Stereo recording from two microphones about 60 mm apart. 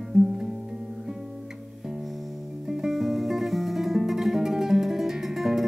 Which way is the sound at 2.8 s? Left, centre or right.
Centre.